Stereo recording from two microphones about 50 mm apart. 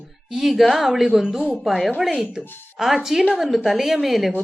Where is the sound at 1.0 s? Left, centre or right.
Centre.